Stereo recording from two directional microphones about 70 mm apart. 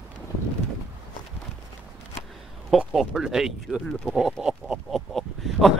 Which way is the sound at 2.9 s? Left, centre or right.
Centre.